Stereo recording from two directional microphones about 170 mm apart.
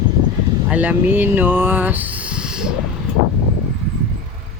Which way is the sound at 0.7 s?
10° right (ahead or behind).